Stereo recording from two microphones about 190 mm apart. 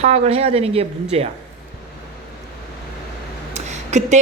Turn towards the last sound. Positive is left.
turn(degrees=-35)  # may be behind; listen again after turning